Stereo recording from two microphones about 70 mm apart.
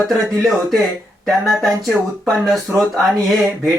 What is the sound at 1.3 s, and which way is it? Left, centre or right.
Speech, centre.